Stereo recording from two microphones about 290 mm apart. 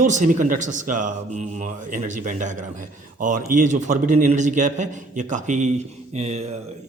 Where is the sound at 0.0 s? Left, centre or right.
Right.